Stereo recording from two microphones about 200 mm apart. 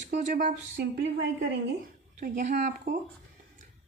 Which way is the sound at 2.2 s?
40° right (ahead or behind).